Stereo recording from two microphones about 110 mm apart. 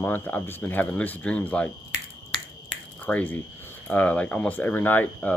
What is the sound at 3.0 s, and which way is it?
Speech, 15° left (ahead or behind).